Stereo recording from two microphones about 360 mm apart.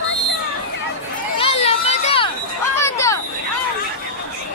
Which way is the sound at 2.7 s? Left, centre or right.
Centre.